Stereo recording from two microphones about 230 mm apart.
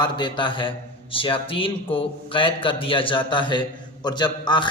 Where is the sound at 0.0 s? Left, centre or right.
Centre.